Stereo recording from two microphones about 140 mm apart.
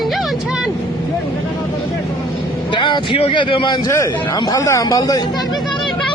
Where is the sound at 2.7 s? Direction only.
35° left (ahead or behind).